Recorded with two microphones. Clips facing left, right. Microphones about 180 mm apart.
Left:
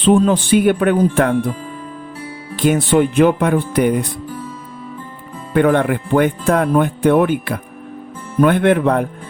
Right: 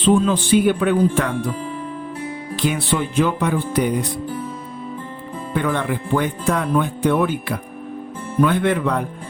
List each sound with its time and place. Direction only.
0.2 s speech: 55° left (ahead or behind)
2.6 s speech: 50° left (ahead or behind)
5.5 s speech: 60° left (ahead or behind)